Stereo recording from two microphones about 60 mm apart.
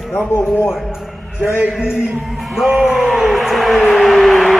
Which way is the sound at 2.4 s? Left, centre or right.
Centre.